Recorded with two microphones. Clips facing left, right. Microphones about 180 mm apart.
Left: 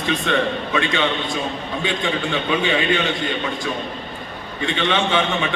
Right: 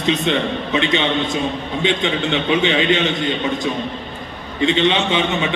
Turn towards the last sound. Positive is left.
turn(degrees=-20)  # may be behind; listen again after turning